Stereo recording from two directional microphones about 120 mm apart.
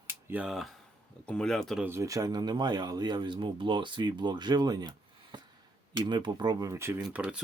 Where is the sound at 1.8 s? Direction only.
25° right (ahead or behind).